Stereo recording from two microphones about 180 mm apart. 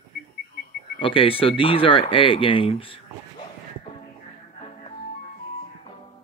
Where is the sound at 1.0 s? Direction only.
30° left (ahead or behind).